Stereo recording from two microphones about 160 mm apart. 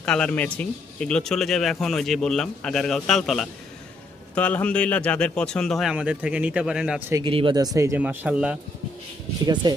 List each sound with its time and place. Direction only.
0.0 s speech: 5° left (ahead or behind)
7.3 s speech: 30° right (ahead or behind); by 8.5 s 5° right (ahead or behind)
9.6 s speech: 25° right (ahead or behind)